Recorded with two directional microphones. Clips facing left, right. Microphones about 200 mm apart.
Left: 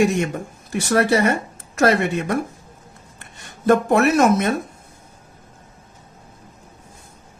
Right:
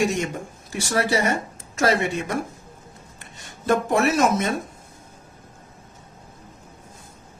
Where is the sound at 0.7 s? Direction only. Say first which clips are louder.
Left 5 dB; 60° left (ahead or behind).